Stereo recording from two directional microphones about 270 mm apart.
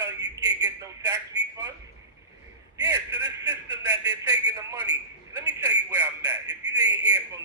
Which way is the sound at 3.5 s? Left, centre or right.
Centre.